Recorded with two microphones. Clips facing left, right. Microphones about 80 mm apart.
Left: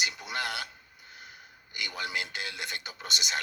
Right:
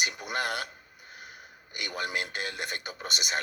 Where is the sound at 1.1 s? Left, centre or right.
Right.